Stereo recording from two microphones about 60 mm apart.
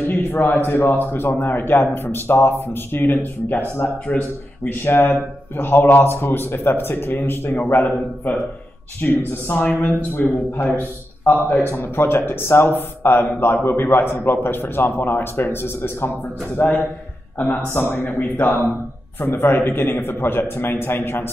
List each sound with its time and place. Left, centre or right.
0.1 s a sound: left
0.7 s speech: left
4.6 s speech: left
16.5 s speech: left